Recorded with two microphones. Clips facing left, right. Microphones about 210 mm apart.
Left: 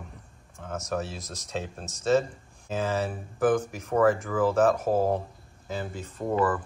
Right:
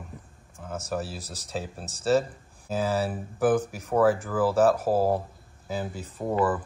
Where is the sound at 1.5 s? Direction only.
5° right (ahead or behind).